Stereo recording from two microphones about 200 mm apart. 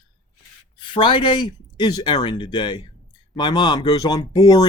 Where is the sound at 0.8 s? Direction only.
25° left (ahead or behind).